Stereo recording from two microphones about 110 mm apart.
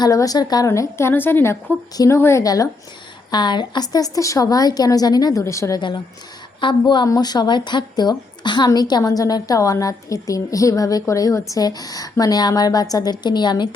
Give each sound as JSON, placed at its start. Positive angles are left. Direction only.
{"t": 0.0, "sound": "a woman's voice", "side_deg": 30}
{"t": 6.6, "sound": "a woman's voice", "side_deg": 45}